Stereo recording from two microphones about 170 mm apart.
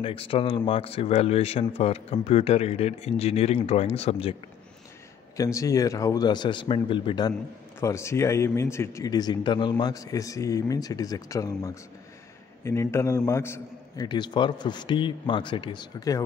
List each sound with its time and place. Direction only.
0.0 s speech: 30° left (ahead or behind)
5.4 s speech: 20° left (ahead or behind)
7.8 s a man's voice: 15° left (ahead or behind)
14.0 s speech: 25° left (ahead or behind)